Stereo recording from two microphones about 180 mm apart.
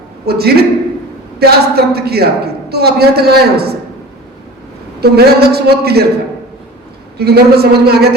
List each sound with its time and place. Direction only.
0.3 s a woman's voice: 60° right (ahead or behind)
4.9 s a woman's voice: 60° right (ahead or behind)
7.2 s a woman's voice: 60° right (ahead or behind)